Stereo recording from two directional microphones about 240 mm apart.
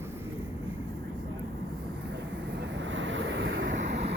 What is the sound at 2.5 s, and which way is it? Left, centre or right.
Vehicle, right.